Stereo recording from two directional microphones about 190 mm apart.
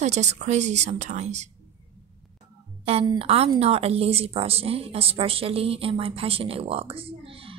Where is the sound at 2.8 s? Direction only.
30° right (ahead or behind).